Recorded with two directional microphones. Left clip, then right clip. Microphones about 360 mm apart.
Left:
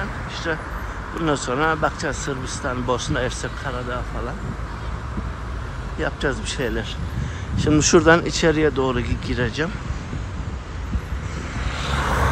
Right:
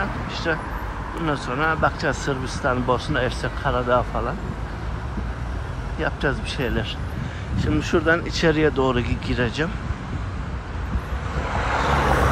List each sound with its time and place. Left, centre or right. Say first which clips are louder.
0.5 s speech: right 2 dB; centre
5.9 s speech: even; centre
11.6 s vehicle: right 4 dB; centre